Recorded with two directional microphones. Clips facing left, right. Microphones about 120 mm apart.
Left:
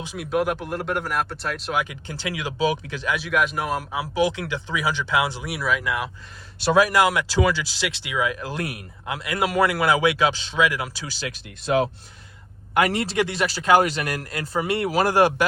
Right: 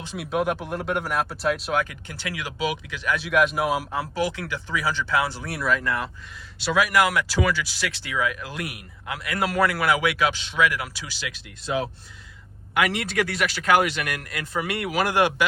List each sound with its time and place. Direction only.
0.2 s speech: centre (ahead or behind)
2.0 s speech: 25° left (ahead or behind)
3.2 s speech: centre (ahead or behind)
4.1 s speech: 20° left (ahead or behind)
6.7 s speech: 30° left (ahead or behind)
11.0 s speech: 40° left (ahead or behind)
11.6 s speech: 70° left (ahead or behind)
12.7 s speech: 40° left (ahead or behind)